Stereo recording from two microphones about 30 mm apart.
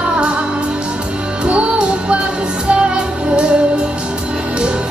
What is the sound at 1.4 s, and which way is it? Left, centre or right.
Music, right.